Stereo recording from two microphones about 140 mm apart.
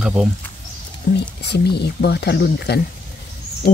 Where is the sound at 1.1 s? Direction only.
90° left.